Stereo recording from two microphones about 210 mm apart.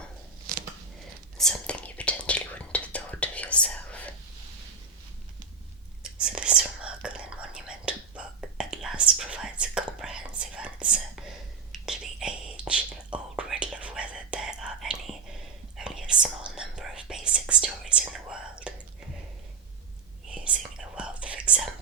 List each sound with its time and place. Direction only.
0.5 s a sound: 40° right (ahead or behind)
1.4 s whispering: 5° left (ahead or behind)
6.1 s whispering: 5° right (ahead or behind)
20.2 s whispering: 5° right (ahead or behind)